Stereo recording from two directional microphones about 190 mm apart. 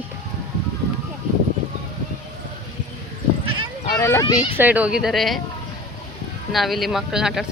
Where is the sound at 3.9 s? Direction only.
15° left (ahead or behind).